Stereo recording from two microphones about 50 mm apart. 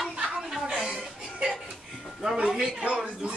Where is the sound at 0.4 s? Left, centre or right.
Centre.